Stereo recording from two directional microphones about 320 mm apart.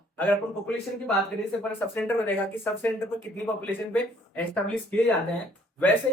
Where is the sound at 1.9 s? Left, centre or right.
Centre.